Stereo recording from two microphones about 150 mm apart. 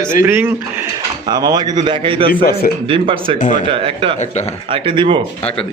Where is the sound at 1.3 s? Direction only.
25° right (ahead or behind).